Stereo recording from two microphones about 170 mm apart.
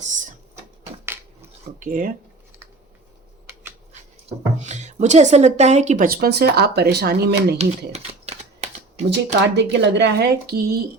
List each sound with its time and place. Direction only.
0.0 s a sound: 50° right (ahead or behind)
1.8 s speech: 50° right (ahead or behind)
4.3 s speech: 45° right (ahead or behind)
6.1 s speech: 65° right (ahead or behind)
7.6 s typing: 40° right (ahead or behind)
9.0 s speech: 90° right; by 10.8 s 65° right (ahead or behind)